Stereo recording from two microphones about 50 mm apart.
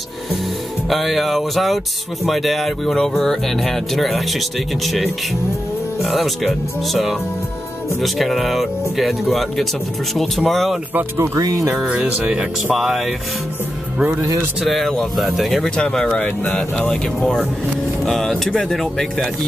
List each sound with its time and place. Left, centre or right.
0.8 s speech: centre
11.8 s speech: centre
12.1 s speech: right
12.7 s speech: centre
14.6 s speech: centre
15.7 s speech: centre
16.2 s speech: left
16.5 s speech: centre
18.0 s speech: centre